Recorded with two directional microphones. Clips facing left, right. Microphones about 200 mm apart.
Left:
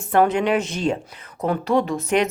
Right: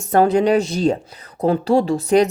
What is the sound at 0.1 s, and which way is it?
Speech, 35° right (ahead or behind).